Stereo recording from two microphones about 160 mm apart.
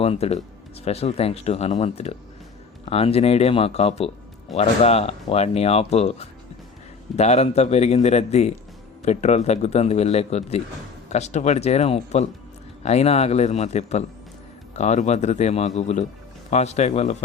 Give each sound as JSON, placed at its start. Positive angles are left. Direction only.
{"t": 0.0, "sound": "a man's voice", "side_deg": 40}